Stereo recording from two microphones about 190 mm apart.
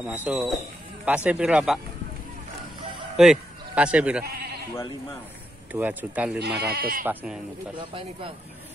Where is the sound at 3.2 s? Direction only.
5° right (ahead or behind).